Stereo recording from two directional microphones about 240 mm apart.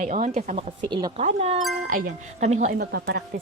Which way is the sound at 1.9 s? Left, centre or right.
Right.